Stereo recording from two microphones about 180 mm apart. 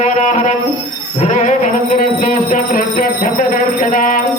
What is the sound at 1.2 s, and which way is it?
Music, 45° left (ahead or behind).